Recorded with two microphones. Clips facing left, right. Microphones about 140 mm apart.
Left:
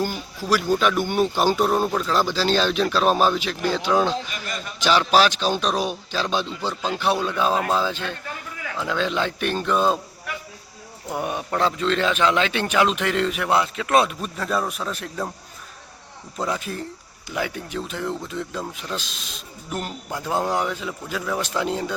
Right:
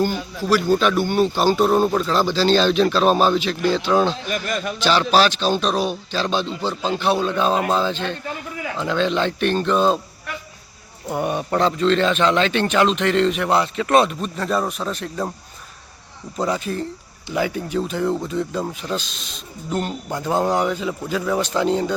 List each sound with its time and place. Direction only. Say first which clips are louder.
0.0 s speech: right 5 dB; 10° left (ahead or behind)
1.6 s speech: right 4 dB; centre (ahead or behind)
4.3 s a man's voice: right 9 dB; 50° right (ahead or behind)
4.8 s speech: right 1 dB; 10° left (ahead or behind)
16.4 s speech: right 4 dB; centre (ahead or behind)